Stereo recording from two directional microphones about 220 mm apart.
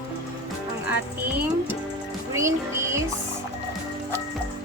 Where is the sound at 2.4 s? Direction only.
15° right (ahead or behind).